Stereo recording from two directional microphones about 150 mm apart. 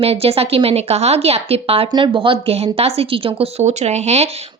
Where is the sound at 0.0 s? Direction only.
40° right (ahead or behind).